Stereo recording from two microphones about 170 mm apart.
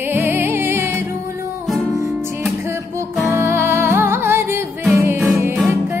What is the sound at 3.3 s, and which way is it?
Music, 15° right (ahead or behind).